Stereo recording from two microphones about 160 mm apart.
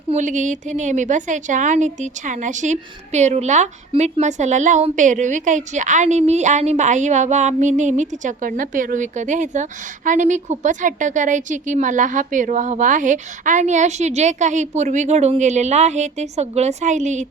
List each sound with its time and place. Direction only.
0.1 s a woman's voice: 50° right (ahead or behind)